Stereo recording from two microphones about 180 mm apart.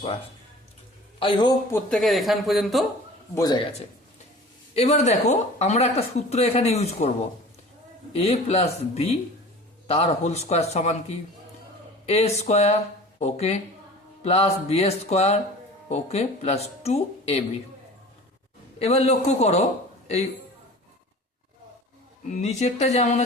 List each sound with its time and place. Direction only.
1.2 s speech: 25° left (ahead or behind)
1.7 s speech: centre (ahead or behind)
3.3 s speech: 20° left (ahead or behind)
4.7 s speech: 35° left (ahead or behind)
8.1 s speech: 35° left (ahead or behind)
18.8 s speech: 35° left (ahead or behind)
22.3 s speech: 40° left (ahead or behind)